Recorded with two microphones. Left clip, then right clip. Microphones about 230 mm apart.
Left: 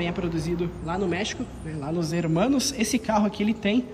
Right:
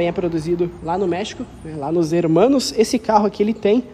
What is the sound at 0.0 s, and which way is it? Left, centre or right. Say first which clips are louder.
A man's voice: right 9 dB; right.